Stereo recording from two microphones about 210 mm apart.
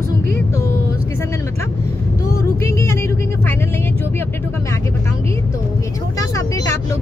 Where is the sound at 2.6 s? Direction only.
10° left (ahead or behind).